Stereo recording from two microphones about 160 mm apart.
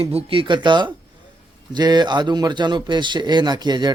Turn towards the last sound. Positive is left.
turn(degrees=-25)  # may be behind; listen again after turning